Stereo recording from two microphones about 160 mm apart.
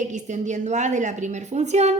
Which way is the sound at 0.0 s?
50° right (ahead or behind).